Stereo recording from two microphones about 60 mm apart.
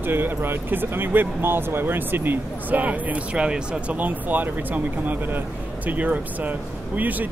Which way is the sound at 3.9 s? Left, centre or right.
Right.